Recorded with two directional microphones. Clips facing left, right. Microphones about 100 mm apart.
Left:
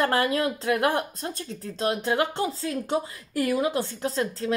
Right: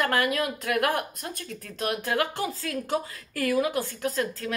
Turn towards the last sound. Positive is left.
turn(degrees=25)  # may be behind; listen again after turning